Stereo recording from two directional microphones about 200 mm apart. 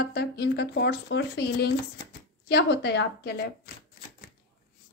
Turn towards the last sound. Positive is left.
turn(degrees=55)  # may be behind; listen again after turning